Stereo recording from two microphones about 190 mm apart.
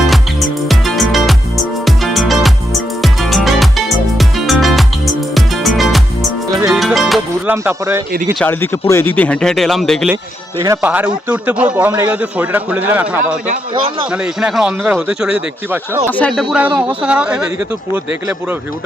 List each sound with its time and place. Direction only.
0.7 s music: centre (ahead or behind)
7.5 s speech: 15° right (ahead or behind)
8.4 s speech: 10° left (ahead or behind); by 13.1 s 10° right (ahead or behind)
13.7 s speech: 25° right (ahead or behind)
14.1 s speech: 5° right (ahead or behind)
16.0 s speech: 10° left (ahead or behind)